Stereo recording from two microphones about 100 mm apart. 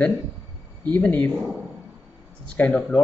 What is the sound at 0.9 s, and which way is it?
Speech, 15° left (ahead or behind).